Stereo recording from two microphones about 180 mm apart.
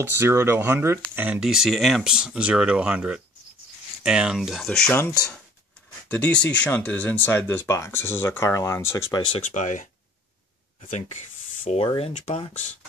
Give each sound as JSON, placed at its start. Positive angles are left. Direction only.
{"t": 0.2, "sound": "speech", "side_deg": -15}
{"t": 9.4, "sound": "speech", "side_deg": 40}
{"t": 10.9, "sound": "speech", "side_deg": 40}